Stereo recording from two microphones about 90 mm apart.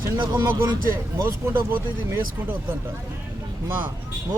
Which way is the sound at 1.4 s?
25° right (ahead or behind).